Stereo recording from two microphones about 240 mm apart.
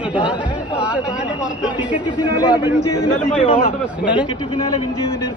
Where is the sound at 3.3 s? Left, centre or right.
Left.